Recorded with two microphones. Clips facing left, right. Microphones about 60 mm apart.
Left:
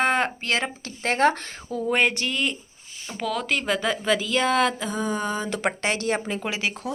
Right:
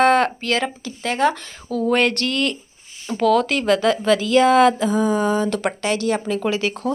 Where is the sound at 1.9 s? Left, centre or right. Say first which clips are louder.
Right 3 dB; centre.